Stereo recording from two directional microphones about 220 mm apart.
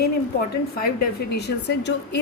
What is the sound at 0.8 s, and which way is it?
Speech, 45° left (ahead or behind).